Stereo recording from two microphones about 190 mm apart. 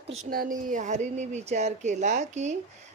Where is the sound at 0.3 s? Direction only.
45° right (ahead or behind).